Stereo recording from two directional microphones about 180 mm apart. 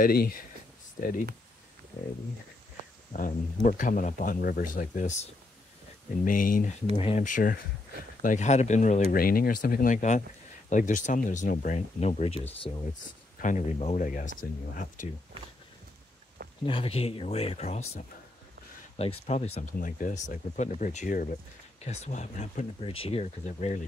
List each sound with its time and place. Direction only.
0.0 s speech: 55° left (ahead or behind)
3.1 s speech: 45° left (ahead or behind)
7.0 s speech: 35° left (ahead or behind)
9.1 s speech: 55° left (ahead or behind); by 12.4 s 35° left (ahead or behind)
13.4 s speech: 45° left (ahead or behind)
16.6 s speech: 30° left (ahead or behind)